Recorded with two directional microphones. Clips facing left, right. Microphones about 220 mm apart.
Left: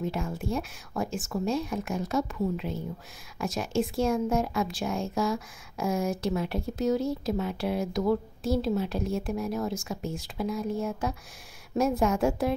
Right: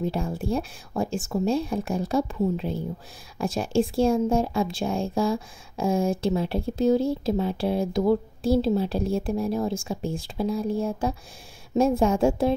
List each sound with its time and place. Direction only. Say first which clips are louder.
0.0 s a woman's voice: right 4 dB; 35° right (ahead or behind)